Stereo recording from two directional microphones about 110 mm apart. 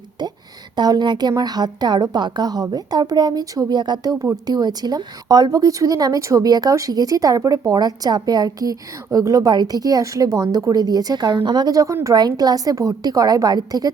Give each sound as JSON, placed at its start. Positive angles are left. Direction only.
{"t": 0.8, "sound": "a woman's voice", "side_deg": -40}